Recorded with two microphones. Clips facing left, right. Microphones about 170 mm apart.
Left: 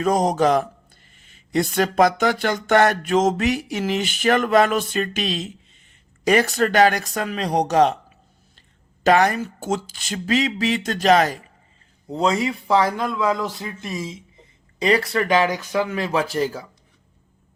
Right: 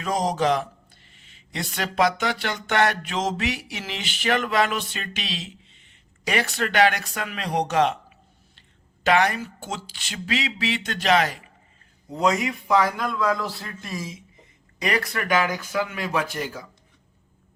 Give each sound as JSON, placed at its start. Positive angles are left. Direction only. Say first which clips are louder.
{"t": 0.0, "sound": "speech", "louder": "left 5 dB", "side_deg": 50}
{"t": 9.0, "sound": "speech", "louder": "left 4 dB", "side_deg": 40}
{"t": 12.1, "sound": "speech", "louder": "left 2 dB", "side_deg": 30}
{"t": 13.1, "sound": "speech", "louder": "left 2 dB", "side_deg": 20}